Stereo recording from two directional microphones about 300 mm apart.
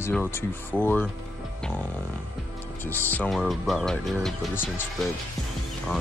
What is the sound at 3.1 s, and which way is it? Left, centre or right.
Speech, centre.